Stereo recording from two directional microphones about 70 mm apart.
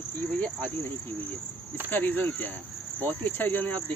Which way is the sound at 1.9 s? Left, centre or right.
Left.